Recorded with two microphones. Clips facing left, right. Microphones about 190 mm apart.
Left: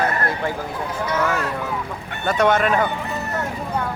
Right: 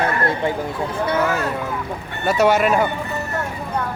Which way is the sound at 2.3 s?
10° right (ahead or behind).